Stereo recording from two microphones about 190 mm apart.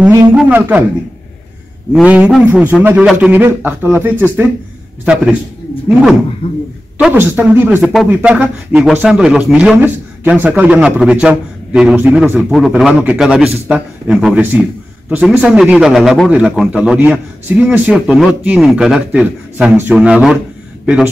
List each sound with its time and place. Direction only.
0.0 s a man's voice: 10° right (ahead or behind)
1.9 s a man's voice: 5° right (ahead or behind)
6.4 s speech: 25° left (ahead or behind)
7.0 s a man's voice: 10° right (ahead or behind)